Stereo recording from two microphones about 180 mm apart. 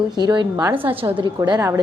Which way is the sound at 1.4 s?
20° right (ahead or behind).